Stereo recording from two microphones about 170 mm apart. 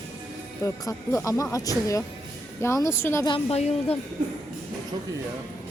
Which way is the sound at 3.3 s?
35° left (ahead or behind).